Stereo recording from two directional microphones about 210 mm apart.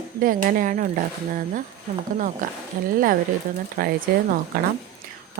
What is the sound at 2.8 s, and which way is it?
Speech, 45° right (ahead or behind).